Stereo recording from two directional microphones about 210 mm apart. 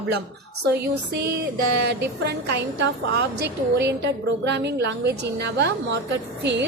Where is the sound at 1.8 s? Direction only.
55° right (ahead or behind).